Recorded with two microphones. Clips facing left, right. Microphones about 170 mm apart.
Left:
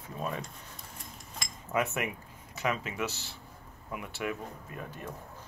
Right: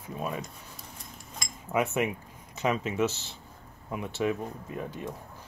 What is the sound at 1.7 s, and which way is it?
Speech, 15° right (ahead or behind).